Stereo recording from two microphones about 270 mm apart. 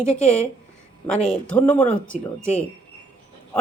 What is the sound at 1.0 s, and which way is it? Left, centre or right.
Speech, centre.